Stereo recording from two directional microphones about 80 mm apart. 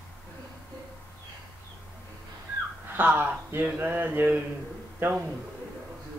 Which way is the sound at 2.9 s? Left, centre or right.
Right.